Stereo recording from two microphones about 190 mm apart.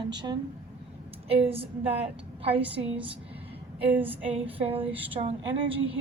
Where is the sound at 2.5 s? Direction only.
5° right (ahead or behind).